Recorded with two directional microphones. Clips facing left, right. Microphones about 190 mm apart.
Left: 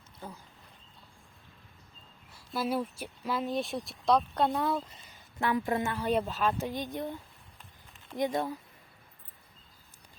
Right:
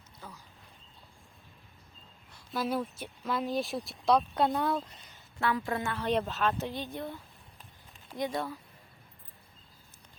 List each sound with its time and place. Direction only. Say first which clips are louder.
2.3 s speech: left 1 dB; 5° left (ahead or behind)
5.4 s speech: left 2 dB; 20° left (ahead or behind)
8.2 s speech: left 3 dB; 20° left (ahead or behind)